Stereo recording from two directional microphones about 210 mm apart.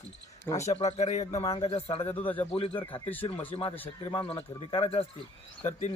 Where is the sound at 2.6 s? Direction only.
25° left (ahead or behind).